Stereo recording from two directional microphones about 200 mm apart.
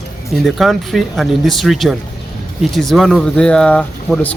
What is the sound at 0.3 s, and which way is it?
A man's voice, centre (ahead or behind).